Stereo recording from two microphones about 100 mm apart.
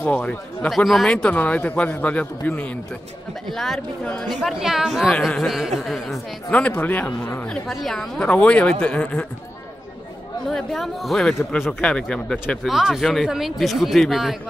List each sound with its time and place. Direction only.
0.0 s a man's voice: 15° left (ahead or behind)
0.7 s a man's voice: centre (ahead or behind)
3.4 s speech: 5° left (ahead or behind)
4.4 s speech: 5° right (ahead or behind)
6.5 s a man's voice: 15° left (ahead or behind)
7.4 s a man's voice: centre (ahead or behind)
10.5 s a man's voice: centre (ahead or behind)
12.6 s speech: 5° right (ahead or behind)